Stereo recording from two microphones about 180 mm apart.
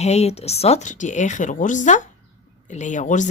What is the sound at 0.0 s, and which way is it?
Speech, 35° left (ahead or behind).